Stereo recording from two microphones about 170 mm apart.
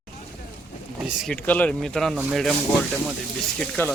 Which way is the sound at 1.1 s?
Centre (ahead or behind).